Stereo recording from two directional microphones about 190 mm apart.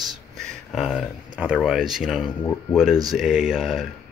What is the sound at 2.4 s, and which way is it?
Speech, 10° left (ahead or behind).